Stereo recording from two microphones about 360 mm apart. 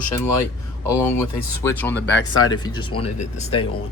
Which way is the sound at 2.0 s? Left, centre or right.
Left.